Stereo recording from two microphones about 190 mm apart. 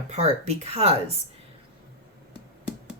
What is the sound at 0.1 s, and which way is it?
Speech, 35° right (ahead or behind).